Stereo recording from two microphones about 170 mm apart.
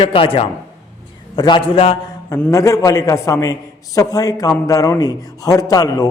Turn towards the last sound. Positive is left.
turn(degrees=20)  # may be behind; listen again after turning